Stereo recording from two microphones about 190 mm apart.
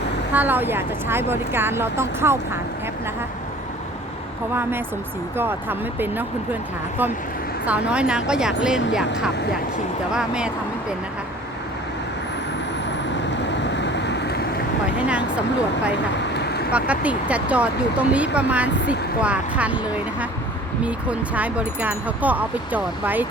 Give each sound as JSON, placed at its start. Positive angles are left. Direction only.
{"t": 0.3, "sound": "speech", "side_deg": -10}
{"t": 5.4, "sound": "speech", "side_deg": -10}
{"t": 7.6, "sound": "a woman's voice", "side_deg": -5}
{"t": 10.2, "sound": "speech", "side_deg": -5}
{"t": 13.4, "sound": "vehicle", "side_deg": 70}
{"t": 14.9, "sound": "speech", "side_deg": -5}
{"t": 16.3, "sound": "vehicle", "side_deg": 60}
{"t": 16.7, "sound": "speech", "side_deg": -5}